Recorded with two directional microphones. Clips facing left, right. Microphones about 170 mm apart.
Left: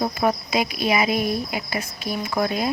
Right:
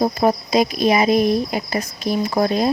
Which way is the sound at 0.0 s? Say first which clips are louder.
Right 5 dB; 35° right (ahead or behind).